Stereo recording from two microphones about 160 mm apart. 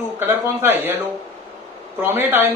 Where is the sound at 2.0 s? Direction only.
15° right (ahead or behind).